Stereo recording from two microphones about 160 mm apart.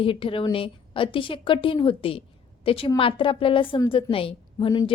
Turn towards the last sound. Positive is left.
turn(degrees=25)  # may be behind; listen again after turning